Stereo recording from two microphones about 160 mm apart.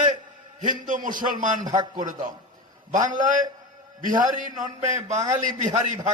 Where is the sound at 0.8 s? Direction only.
55° right (ahead or behind).